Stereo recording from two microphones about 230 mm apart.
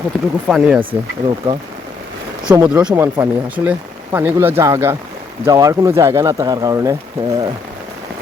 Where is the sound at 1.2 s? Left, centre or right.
Right.